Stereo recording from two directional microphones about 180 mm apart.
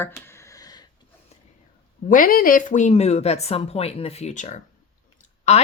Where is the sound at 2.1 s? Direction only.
50° left (ahead or behind).